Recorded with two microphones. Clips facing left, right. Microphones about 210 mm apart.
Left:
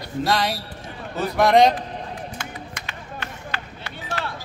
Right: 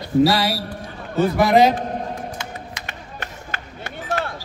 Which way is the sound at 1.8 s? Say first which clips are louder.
Right 6 dB; 50° right (ahead or behind).